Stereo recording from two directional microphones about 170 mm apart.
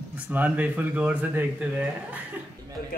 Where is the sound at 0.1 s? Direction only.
10° right (ahead or behind).